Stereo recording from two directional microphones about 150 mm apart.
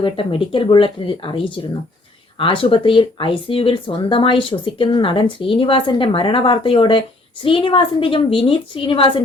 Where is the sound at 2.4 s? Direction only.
35° left (ahead or behind).